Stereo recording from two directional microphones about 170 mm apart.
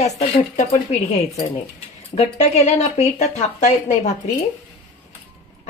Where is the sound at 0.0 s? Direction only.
40° left (ahead or behind).